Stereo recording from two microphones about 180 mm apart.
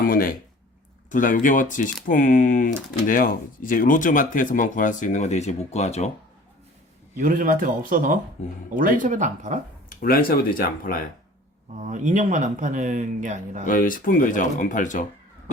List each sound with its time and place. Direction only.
0.0 s a sound: 50° left (ahead or behind)
1.1 s speech: 45° left (ahead or behind)
7.2 s speech: 50° right (ahead or behind)
10.0 s speech: 55° left (ahead or behind)
11.8 s speech: 45° right (ahead or behind)
13.7 s speech: 50° left (ahead or behind)